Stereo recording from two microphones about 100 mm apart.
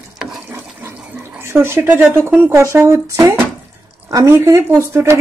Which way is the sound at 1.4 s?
25° right (ahead or behind).